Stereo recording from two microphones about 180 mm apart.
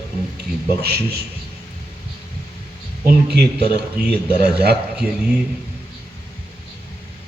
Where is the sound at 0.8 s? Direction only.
60° right (ahead or behind).